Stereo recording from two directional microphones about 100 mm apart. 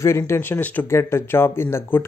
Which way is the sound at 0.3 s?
20° left (ahead or behind).